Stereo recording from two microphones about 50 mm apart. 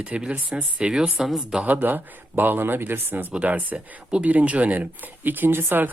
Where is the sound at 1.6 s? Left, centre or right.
Right.